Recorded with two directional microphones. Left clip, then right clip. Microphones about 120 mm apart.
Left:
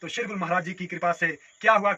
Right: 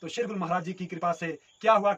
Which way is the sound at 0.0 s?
35° right (ahead or behind).